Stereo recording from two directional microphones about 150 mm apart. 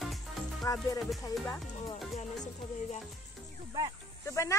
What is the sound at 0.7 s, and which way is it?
Speech, 20° left (ahead or behind).